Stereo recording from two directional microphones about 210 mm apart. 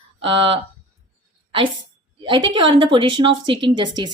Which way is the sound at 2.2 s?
25° right (ahead or behind).